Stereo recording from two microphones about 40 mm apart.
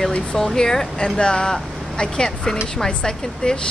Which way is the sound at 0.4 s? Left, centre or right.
Centre.